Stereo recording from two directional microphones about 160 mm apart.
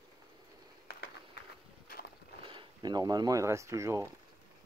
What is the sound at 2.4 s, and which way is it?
Speech, 30° right (ahead or behind).